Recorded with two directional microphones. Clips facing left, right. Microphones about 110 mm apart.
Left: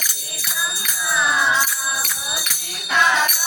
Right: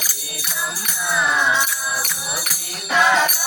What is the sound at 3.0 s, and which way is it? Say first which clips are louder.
Music: right 2 dB; 30° right (ahead or behind).